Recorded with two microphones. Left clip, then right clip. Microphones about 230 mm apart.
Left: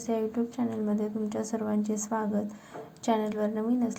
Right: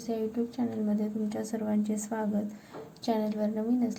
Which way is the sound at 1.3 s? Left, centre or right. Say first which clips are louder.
Left 2 dB; centre.